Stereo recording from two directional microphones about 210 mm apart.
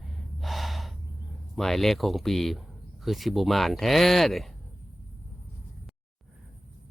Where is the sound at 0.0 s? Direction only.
Centre (ahead or behind).